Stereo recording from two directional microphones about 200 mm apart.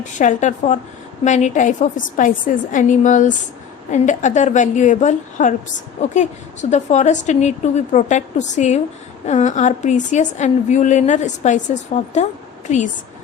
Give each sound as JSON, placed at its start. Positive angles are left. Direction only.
{"t": 0.0, "sound": "a woman's voice", "side_deg": 40}